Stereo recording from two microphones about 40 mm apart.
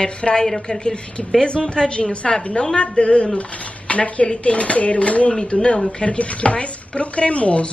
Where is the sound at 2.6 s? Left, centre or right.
Left.